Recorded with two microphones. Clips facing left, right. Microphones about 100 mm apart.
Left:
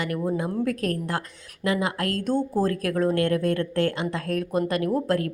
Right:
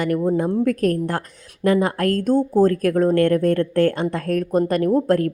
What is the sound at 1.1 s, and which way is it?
A woman's voice, 45° right (ahead or behind).